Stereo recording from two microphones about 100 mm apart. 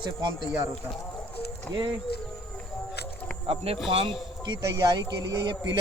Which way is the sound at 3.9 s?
55° right (ahead or behind).